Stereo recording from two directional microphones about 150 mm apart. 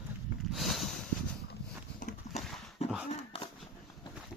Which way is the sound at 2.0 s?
60° left (ahead or behind).